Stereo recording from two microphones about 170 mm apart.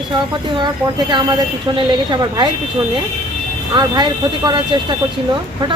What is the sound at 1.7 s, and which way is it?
Speech, 30° right (ahead or behind).